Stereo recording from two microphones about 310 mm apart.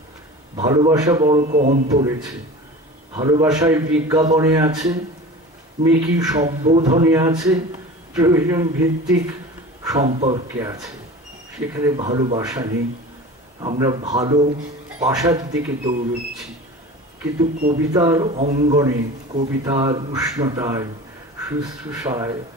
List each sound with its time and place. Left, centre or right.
0.6 s a man's voice: centre
1.4 s a man's voice: right
1.9 s a man's voice: centre
9.8 s a man's voice: centre
17.6 s a man's voice: right
17.9 s a man's voice: centre